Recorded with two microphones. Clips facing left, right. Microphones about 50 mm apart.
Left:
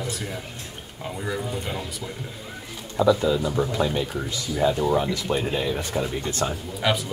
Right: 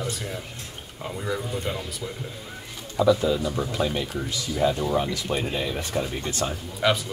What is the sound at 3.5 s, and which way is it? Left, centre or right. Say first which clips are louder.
Speech: left 3 dB; left.